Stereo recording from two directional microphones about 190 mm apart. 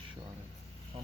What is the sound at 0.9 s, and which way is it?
Speech, 25° right (ahead or behind).